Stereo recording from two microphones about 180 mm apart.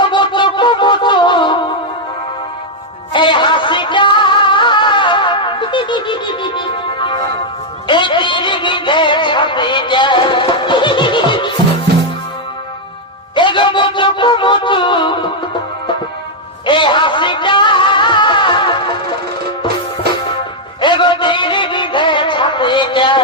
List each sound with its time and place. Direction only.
0.0 s music: 25° left (ahead or behind)
3.1 s music: 25° left (ahead or behind)
13.3 s music: 25° left (ahead or behind)
16.6 s music: 25° left (ahead or behind)
20.8 s music: 25° left (ahead or behind)